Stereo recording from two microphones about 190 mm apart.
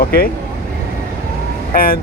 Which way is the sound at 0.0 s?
50° left (ahead or behind).